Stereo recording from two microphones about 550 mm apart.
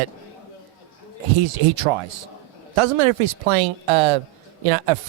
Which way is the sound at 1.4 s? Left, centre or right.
Right.